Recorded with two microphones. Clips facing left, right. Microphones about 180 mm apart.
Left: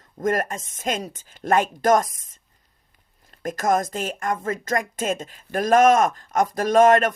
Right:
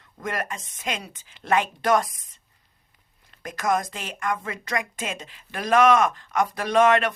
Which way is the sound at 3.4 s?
45° left (ahead or behind).